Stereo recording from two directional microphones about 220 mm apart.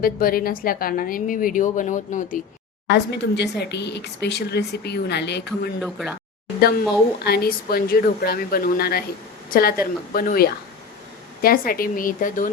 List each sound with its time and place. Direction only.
0.0 s a woman's voice: 40° left (ahead or behind)
2.9 s a woman's voice: 50° left (ahead or behind)
5.8 s speech: centre (ahead or behind)
6.6 s a woman's voice: 45° left (ahead or behind)